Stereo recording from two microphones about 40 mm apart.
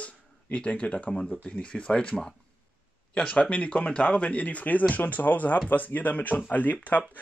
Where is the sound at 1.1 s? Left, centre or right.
Centre.